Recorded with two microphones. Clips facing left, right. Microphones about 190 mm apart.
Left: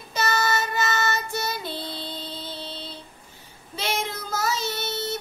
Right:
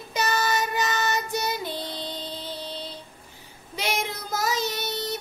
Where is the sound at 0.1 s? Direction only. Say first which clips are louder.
Left 1 dB; 15° right (ahead or behind).